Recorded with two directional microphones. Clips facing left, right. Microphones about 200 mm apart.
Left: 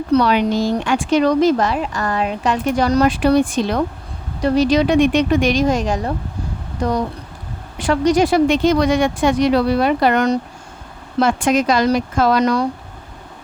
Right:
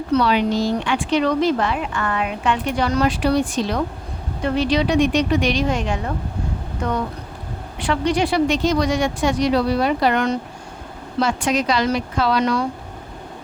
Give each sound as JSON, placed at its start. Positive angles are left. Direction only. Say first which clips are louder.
{"t": 0.1, "sound": "speech", "louder": "left 3 dB", "side_deg": 45}
{"t": 4.4, "sound": "speech", "louder": "left 5 dB", "side_deg": 40}